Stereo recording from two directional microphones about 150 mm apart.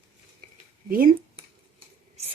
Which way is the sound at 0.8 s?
70° right (ahead or behind).